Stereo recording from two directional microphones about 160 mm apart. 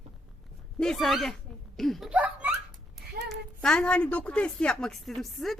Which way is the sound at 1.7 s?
Centre (ahead or behind).